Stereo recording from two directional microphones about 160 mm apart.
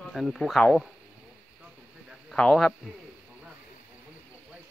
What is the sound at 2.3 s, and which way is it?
Speech, centre (ahead or behind).